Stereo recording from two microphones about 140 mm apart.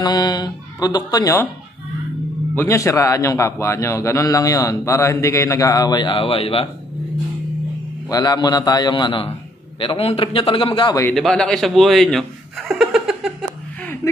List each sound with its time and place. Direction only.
0.0 s a man's voice: 30° left (ahead or behind)
2.5 s a man's voice: 15° left (ahead or behind); by 6.7 s 45° left (ahead or behind)
8.1 s a man's voice: 30° left (ahead or behind)
11.1 s a man's voice: 5° left (ahead or behind)
14.0 s speech: 20° left (ahead or behind)